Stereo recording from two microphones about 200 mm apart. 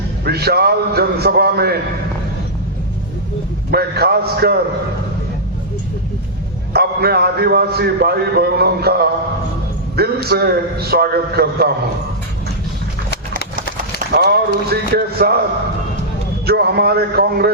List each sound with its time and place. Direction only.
0.3 s a man's voice: 50° right (ahead or behind)
3.7 s a man's voice: 50° right (ahead or behind)
6.7 s a man's voice: 50° right (ahead or behind)
10.2 s a man's voice: 50° right (ahead or behind)
14.3 s a man's voice: 50° right (ahead or behind)
16.5 s a man's voice: 50° right (ahead or behind)